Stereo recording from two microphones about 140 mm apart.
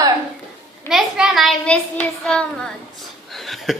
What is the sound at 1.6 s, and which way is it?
Child singing, 10° left (ahead or behind).